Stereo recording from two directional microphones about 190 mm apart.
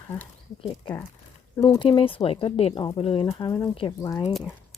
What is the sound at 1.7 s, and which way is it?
Speech, 25° left (ahead or behind).